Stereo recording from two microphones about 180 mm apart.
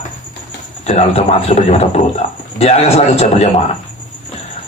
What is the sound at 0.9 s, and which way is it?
A man's voice, 35° left (ahead or behind).